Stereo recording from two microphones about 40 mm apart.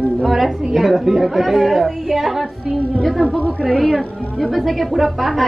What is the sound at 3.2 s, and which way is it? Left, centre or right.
Speech, left.